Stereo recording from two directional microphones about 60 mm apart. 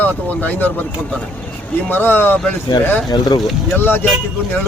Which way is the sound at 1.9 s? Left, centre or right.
Left.